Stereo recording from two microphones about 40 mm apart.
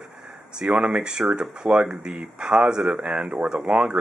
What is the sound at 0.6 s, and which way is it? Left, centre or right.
Speech, right.